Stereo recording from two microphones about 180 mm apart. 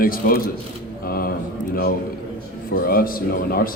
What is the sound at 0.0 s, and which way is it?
Speech, 55° left (ahead or behind).